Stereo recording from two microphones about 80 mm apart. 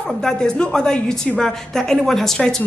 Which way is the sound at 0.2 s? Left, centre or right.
Centre.